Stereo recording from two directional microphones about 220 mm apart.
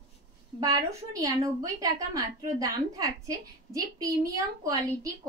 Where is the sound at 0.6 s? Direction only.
15° right (ahead or behind).